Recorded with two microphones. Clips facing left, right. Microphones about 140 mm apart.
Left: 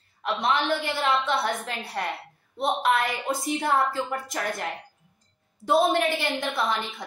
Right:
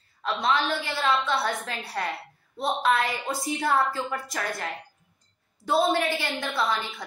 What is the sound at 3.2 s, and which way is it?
A woman's voice, 20° left (ahead or behind).